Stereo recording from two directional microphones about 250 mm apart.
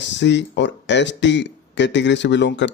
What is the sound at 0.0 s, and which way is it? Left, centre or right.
Speech, left.